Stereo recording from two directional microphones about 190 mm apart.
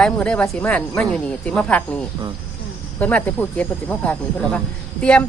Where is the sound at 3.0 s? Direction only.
10° left (ahead or behind).